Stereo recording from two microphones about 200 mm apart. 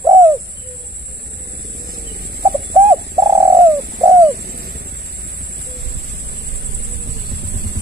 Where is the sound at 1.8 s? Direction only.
50° right (ahead or behind).